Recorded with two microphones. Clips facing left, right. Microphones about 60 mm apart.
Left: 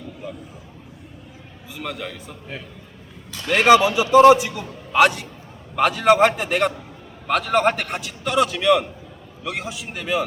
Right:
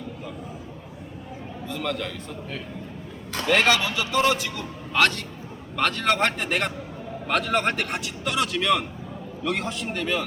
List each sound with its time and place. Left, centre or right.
1.6 s a man's voice: centre